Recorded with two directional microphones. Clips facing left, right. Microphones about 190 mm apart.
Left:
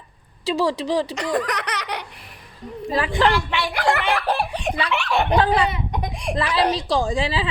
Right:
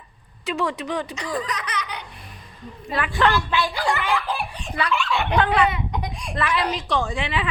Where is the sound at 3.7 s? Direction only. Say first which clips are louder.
Left 3 dB; 70° left (ahead or behind).